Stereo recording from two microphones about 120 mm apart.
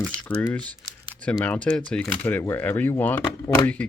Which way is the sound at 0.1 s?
10° left (ahead or behind).